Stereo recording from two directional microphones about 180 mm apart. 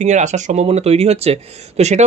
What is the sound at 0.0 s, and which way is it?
Speech, 40° right (ahead or behind).